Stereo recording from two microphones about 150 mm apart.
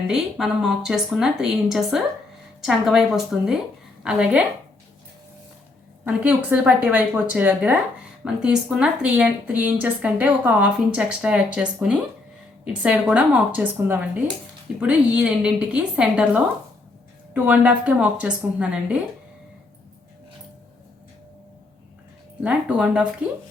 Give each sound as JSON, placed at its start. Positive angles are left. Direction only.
{"t": 0.1, "sound": "speech", "side_deg": -5}
{"t": 6.1, "sound": "speech", "side_deg": -10}
{"t": 22.4, "sound": "speech", "side_deg": -10}